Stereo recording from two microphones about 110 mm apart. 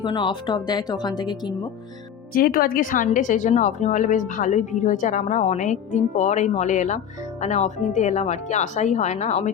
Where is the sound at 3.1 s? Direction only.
90° left.